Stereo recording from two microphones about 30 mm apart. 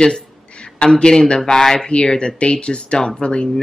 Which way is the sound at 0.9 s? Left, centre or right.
Left.